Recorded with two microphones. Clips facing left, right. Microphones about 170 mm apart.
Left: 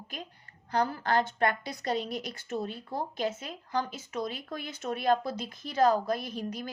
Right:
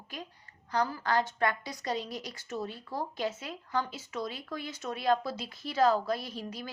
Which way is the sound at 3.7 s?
40° left (ahead or behind).